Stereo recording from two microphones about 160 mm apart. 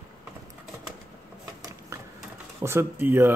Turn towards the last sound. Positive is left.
turn(degrees=-15)  # may be behind; listen again after turning